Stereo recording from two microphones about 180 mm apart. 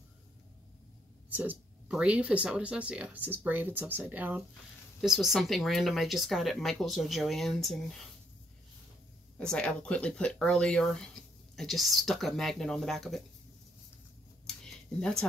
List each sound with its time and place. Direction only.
1.3 s speech: 10° right (ahead or behind)
9.4 s speech: 5° left (ahead or behind)
14.4 s a sound: 5° left (ahead or behind)